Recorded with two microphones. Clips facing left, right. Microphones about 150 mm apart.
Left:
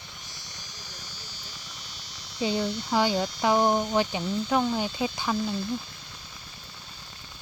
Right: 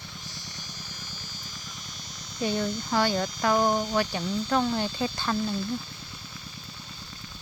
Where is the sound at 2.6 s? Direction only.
Centre (ahead or behind).